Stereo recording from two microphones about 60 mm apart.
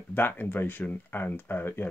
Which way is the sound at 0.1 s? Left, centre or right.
Left.